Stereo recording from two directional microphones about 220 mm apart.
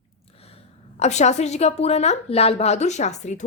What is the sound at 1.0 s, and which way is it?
A woman's voice, 30° left (ahead or behind).